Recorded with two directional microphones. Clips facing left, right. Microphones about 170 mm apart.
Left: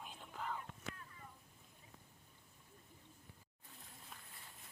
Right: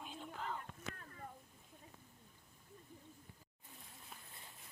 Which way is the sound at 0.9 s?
50° right (ahead or behind).